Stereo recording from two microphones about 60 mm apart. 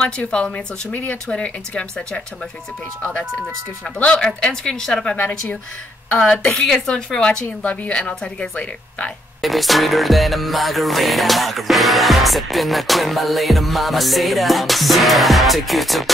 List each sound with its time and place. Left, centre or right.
0.0 s a woman's voice: centre
5.1 s speech: left
6.4 s a woman's voice: centre
9.4 s music: centre